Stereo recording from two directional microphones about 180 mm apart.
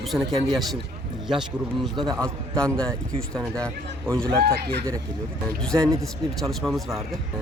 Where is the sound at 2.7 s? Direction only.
5° left (ahead or behind).